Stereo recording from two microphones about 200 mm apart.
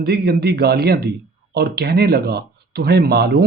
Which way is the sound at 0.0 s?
55° right (ahead or behind).